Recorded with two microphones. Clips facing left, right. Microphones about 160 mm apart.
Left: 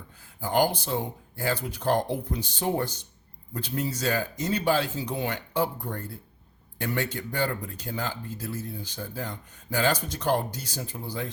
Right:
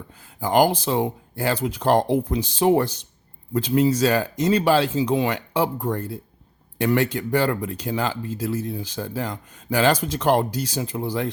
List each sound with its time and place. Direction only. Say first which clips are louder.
0.3 s speech: right 6 dB; 90° right